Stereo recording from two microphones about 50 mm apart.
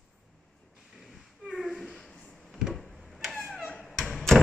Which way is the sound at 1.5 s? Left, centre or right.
Centre.